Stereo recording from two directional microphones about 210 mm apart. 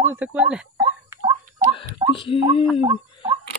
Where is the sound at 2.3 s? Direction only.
25° left (ahead or behind).